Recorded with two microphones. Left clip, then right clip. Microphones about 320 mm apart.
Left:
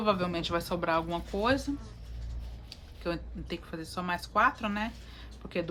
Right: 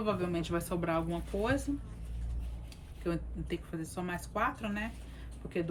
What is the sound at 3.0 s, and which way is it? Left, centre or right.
Speech, centre.